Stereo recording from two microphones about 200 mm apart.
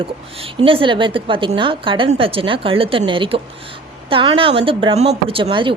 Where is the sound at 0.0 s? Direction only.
25° right (ahead or behind).